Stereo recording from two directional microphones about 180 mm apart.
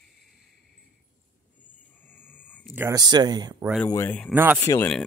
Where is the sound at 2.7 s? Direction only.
15° right (ahead or behind).